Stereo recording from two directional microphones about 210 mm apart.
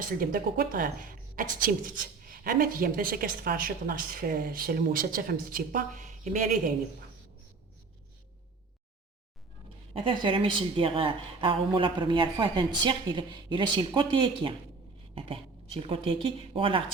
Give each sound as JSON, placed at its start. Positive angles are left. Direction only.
{"t": 0.0, "sound": "speech", "side_deg": -40}
{"t": 9.9, "sound": "a woman's voice", "side_deg": -25}